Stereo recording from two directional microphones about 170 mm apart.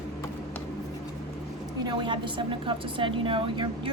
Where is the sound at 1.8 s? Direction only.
30° right (ahead or behind).